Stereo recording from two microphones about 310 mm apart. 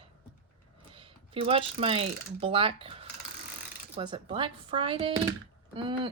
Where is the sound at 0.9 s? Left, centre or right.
Centre.